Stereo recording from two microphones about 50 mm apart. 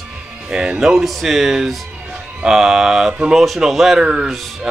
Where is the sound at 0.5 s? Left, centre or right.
Centre.